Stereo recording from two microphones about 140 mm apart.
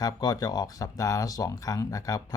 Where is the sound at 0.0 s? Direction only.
25° left (ahead or behind).